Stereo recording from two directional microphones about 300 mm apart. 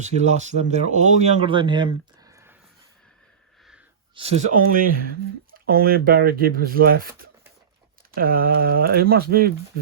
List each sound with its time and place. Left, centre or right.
0.0 s speech: right
4.1 s speech: centre